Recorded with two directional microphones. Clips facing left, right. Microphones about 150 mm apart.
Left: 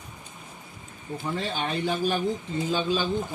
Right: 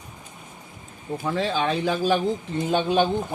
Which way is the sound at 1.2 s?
90° right.